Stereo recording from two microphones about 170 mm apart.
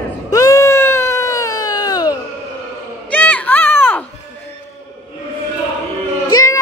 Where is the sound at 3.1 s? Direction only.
10° left (ahead or behind).